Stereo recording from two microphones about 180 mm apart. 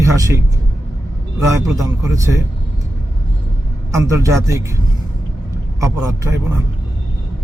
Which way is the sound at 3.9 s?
15° right (ahead or behind).